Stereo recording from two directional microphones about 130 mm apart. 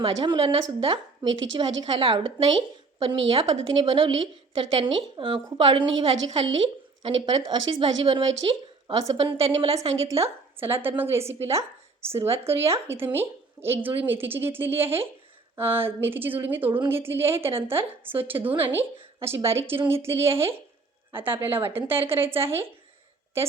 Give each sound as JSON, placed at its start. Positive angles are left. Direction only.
{"t": 0.0, "sound": "speech", "side_deg": -40}
{"t": 10.2, "sound": "a woman's voice", "side_deg": -20}